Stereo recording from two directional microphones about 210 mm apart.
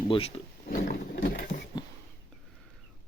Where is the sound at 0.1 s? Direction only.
25° left (ahead or behind).